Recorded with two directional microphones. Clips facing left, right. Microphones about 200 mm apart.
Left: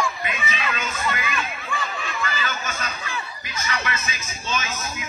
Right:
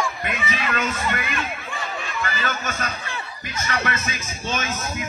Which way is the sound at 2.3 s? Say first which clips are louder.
Right 2 dB; 55° right (ahead or behind).